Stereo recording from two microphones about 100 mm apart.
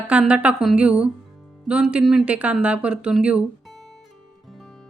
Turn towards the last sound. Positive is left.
turn(degrees=0)  # may be behind; listen again after turning